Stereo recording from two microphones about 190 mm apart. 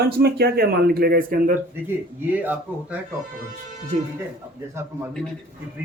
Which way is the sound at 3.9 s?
35° right (ahead or behind).